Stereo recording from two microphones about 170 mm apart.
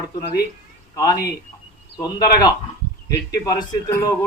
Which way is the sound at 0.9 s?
20° left (ahead or behind).